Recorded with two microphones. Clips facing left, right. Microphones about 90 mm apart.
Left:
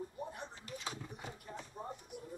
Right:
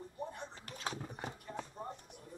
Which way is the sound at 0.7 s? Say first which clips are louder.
Right 4 dB; 55° right (ahead or behind).